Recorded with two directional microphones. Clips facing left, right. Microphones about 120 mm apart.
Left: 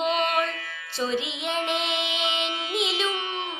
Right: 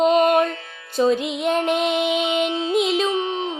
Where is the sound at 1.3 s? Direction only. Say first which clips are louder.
Right 8 dB; 40° right (ahead or behind).